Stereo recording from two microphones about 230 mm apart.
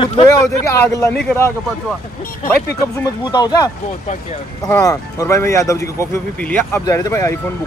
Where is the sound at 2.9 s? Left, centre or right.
Centre.